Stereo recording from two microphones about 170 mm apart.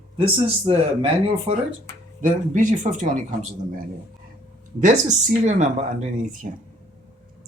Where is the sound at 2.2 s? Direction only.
50° right (ahead or behind).